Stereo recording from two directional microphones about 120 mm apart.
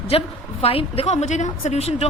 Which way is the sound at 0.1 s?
50° left (ahead or behind).